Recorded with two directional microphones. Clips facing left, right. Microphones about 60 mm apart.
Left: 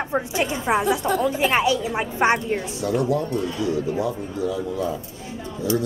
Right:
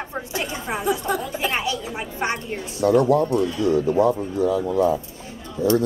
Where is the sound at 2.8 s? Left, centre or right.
Right.